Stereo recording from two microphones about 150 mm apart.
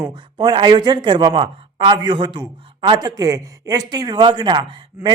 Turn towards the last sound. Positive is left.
turn(degrees=-30)  # may be behind; listen again after turning